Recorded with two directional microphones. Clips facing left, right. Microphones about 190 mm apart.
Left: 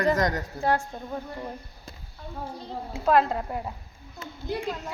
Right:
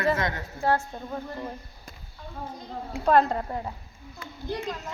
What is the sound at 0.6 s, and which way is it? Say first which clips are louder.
Speech: right 1 dB; 15° left (ahead or behind).